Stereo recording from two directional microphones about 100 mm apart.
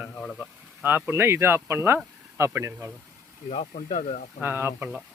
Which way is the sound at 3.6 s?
80° left.